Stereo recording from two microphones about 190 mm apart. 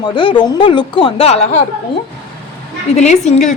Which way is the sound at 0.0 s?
25° left (ahead or behind).